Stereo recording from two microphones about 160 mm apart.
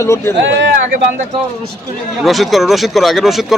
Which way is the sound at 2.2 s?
Centre (ahead or behind).